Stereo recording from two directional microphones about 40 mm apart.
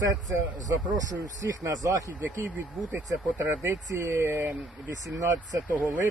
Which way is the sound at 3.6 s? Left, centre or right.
Right.